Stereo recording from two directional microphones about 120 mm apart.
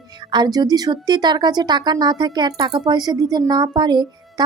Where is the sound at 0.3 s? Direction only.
35° right (ahead or behind).